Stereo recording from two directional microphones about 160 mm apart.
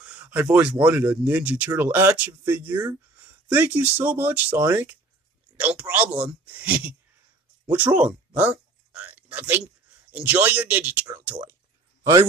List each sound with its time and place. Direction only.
0.0 s a man's voice: 10° right (ahead or behind); by 12.3 s 25° right (ahead or behind)